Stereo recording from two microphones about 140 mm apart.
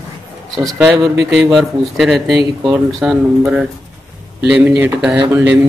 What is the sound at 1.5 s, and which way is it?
Speech, centre (ahead or behind).